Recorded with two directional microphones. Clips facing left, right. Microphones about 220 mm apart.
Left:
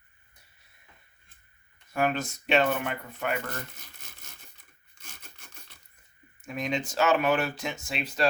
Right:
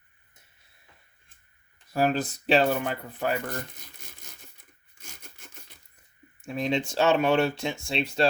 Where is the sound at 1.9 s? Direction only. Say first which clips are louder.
Right 3 dB; 35° right (ahead or behind).